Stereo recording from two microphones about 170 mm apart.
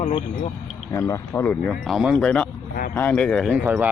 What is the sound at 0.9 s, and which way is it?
Speech, 20° left (ahead or behind).